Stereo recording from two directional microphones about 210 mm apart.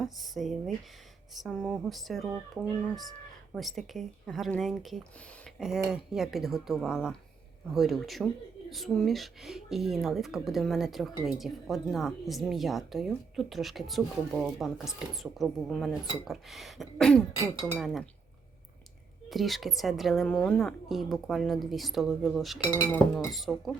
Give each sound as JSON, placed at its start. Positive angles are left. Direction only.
{"t": 0.0, "sound": "speech", "side_deg": 0}
{"t": 17.4, "sound": "speech", "side_deg": -10}
{"t": 19.3, "sound": "speech", "side_deg": 0}
{"t": 22.6, "sound": "speech", "side_deg": 15}
{"t": 23.3, "sound": "speech", "side_deg": 0}